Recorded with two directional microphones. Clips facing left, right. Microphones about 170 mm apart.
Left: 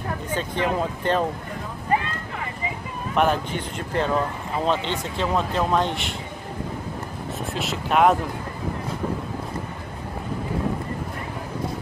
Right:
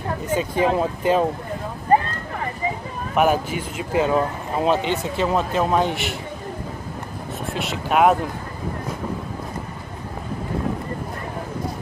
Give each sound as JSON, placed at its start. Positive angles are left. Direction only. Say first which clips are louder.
{"t": 0.3, "sound": "a man's voice", "louder": "right 5 dB", "side_deg": -10}
{"t": 1.9, "sound": "vehicle", "louder": "right 6 dB", "side_deg": -40}
{"t": 3.2, "sound": "a man's voice", "louder": "right 3 dB", "side_deg": -5}
{"t": 7.5, "sound": "speech", "louder": "right 1 dB", "side_deg": 0}